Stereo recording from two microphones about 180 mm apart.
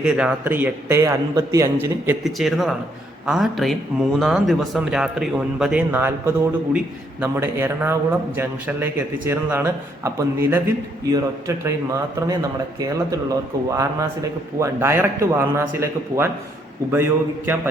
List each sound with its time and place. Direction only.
0.0 s a man's voice: 5° right (ahead or behind)
2.2 s a man's voice: centre (ahead or behind); by 13.1 s 20° right (ahead or behind)
14.6 s a man's voice: 15° right (ahead or behind)